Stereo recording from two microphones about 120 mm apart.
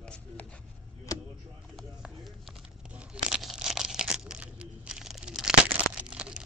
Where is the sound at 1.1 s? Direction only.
30° left (ahead or behind).